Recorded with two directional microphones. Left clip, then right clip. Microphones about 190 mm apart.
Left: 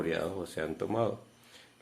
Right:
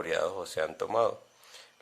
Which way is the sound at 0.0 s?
40° right (ahead or behind).